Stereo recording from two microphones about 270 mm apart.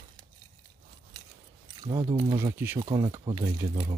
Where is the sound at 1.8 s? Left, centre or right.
Centre.